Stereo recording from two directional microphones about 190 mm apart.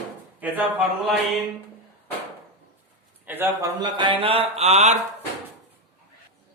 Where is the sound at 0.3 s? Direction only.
10° right (ahead or behind).